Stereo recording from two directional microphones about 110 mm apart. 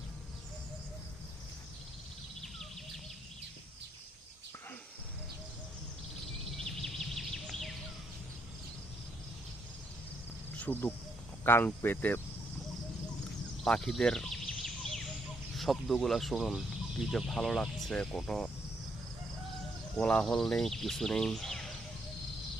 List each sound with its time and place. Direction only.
2.4 s bird: centre (ahead or behind)
6.6 s a sound: 5° left (ahead or behind)
10.6 s cricket: 15° left (ahead or behind)
11.4 s speech: 20° left (ahead or behind)
13.7 s a sound: 5° left (ahead or behind)
15.5 s speech: centre (ahead or behind)
20.0 s speech: 10° left (ahead or behind)